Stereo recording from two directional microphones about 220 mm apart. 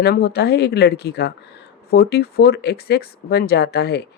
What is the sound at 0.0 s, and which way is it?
Speech, 45° left (ahead or behind).